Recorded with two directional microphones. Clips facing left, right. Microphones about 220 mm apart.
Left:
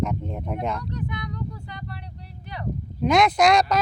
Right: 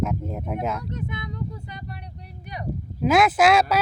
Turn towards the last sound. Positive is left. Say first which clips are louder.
# even
turn(degrees=-5)  # may be behind; listen again after turning